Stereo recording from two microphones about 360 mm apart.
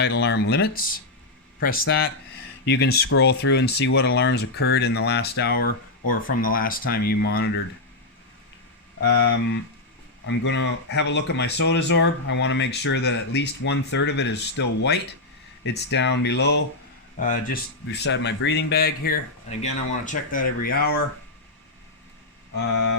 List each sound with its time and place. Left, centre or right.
0.0 s speech: left
10.2 s speech: left